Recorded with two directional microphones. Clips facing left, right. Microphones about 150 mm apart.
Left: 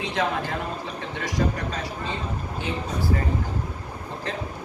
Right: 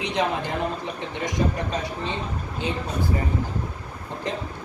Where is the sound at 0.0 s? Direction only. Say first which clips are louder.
Right 1 dB; 20° right (ahead or behind).